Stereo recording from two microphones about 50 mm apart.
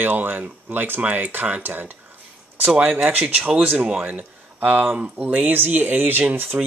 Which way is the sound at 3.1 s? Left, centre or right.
Right.